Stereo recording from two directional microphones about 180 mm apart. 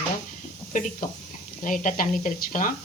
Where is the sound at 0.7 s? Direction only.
45° left (ahead or behind).